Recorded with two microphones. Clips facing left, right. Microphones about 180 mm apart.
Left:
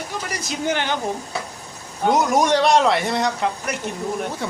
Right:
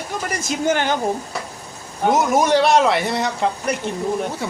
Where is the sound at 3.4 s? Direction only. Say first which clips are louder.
Right 3 dB; 30° right (ahead or behind).